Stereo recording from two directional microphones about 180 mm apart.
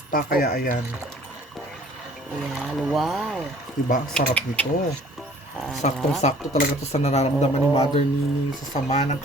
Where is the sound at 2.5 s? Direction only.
Centre (ahead or behind).